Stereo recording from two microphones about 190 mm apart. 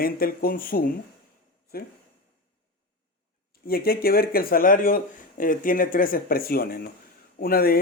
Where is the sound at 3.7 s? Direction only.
50° left (ahead or behind).